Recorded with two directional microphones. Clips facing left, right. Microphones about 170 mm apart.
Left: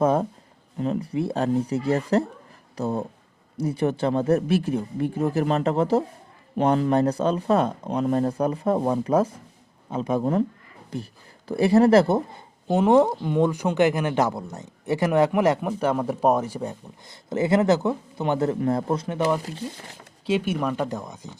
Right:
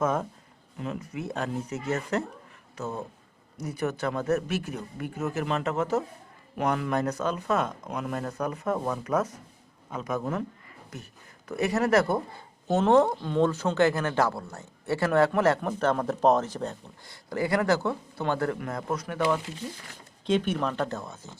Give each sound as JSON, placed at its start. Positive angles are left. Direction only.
{"t": 0.0, "sound": "speech", "side_deg": 35}
{"t": 12.6, "sound": "speech", "side_deg": 15}
{"t": 17.1, "sound": "speech", "side_deg": 20}
{"t": 19.4, "sound": "speech", "side_deg": 40}
{"t": 20.2, "sound": "speech", "side_deg": 10}